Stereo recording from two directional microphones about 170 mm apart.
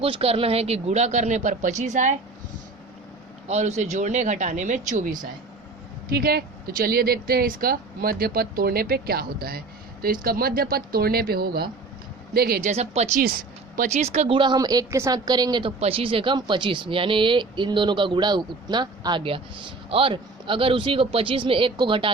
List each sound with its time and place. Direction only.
0.0 s speech: 35° right (ahead or behind)
3.5 s speech: 45° right (ahead or behind)
6.1 s speech: 65° right (ahead or behind)
12.6 s speech: 40° right (ahead or behind)